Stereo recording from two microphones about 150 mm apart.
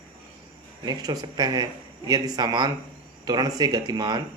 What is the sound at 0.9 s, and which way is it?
Speech, 25° right (ahead or behind).